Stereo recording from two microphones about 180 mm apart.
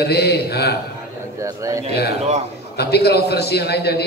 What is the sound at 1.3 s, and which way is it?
Speech, 15° right (ahead or behind).